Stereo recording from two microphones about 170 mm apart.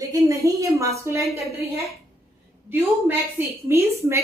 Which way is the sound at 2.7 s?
10° right (ahead or behind).